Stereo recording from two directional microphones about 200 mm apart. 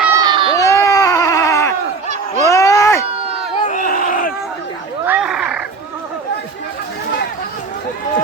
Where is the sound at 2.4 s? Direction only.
15° left (ahead or behind).